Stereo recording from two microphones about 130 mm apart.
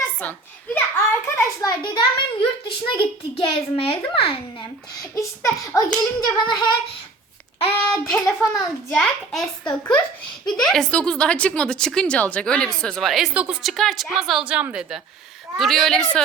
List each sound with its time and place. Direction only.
0.2 s a child's voice: 10° left (ahead or behind)
1.8 s a child's voice: 40° left (ahead or behind)
5.1 s a child's voice: 25° left (ahead or behind)
7.9 s a woman's voice: 5° left (ahead or behind)